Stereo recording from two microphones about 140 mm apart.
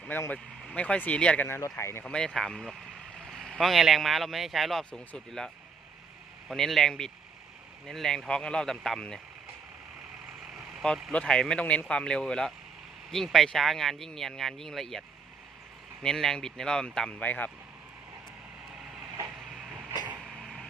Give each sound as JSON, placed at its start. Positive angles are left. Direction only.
{"t": 0.1, "sound": "speech", "side_deg": 10}
{"t": 2.0, "sound": "speech", "side_deg": 5}
{"t": 6.5, "sound": "speech", "side_deg": 0}
{"t": 10.8, "sound": "speech", "side_deg": 0}
{"t": 16.0, "sound": "speech", "side_deg": 5}
{"t": 20.2, "sound": "a sound", "side_deg": 0}